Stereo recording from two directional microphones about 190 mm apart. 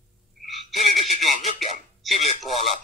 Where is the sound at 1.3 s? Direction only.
Centre (ahead or behind).